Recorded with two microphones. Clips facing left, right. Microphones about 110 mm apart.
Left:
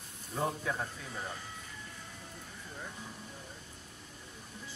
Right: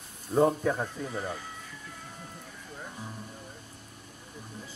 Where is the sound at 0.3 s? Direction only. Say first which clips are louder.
Right 10 dB; 40° right (ahead or behind).